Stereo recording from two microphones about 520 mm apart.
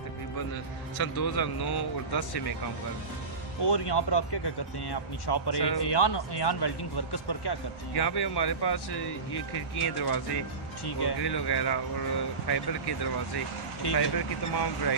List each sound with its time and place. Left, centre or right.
1.0 s speech: left
3.6 s speech: left